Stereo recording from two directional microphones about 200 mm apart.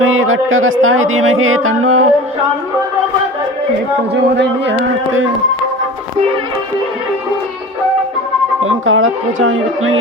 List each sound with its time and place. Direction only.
0.0 s speech: 90° right
4.1 s speech: 60° right (ahead or behind)
8.6 s speech: 90° right